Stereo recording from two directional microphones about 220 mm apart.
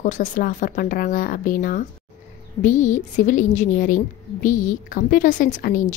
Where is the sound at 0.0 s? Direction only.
35° left (ahead or behind).